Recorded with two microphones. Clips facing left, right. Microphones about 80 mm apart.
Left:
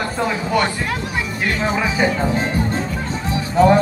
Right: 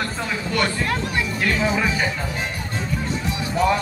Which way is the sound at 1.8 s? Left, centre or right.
Centre.